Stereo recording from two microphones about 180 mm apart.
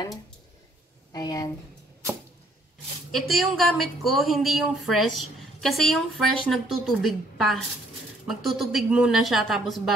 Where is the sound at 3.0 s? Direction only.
Centre (ahead or behind).